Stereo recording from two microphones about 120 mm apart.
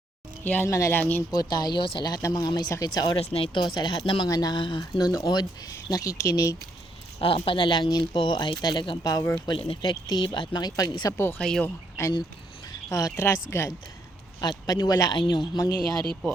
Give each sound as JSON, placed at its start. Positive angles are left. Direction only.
{"t": 0.4, "sound": "speech", "side_deg": 20}
{"t": 1.3, "sound": "speech", "side_deg": 35}
{"t": 3.2, "sound": "speech", "side_deg": 50}
{"t": 4.8, "sound": "speech", "side_deg": 30}
{"t": 7.2, "sound": "speech", "side_deg": 50}
{"t": 9.5, "sound": "speech", "side_deg": 45}
{"t": 11.3, "sound": "speech", "side_deg": 5}
{"t": 12.9, "sound": "speech", "side_deg": 25}